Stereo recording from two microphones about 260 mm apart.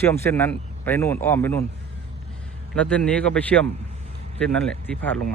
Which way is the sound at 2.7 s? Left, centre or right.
Centre.